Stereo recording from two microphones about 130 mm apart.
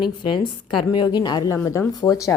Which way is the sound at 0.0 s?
35° left (ahead or behind).